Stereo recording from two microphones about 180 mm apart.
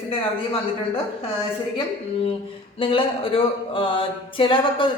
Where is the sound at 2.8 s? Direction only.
30° left (ahead or behind).